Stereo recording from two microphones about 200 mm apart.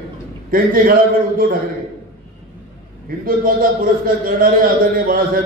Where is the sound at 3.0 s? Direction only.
45° right (ahead or behind).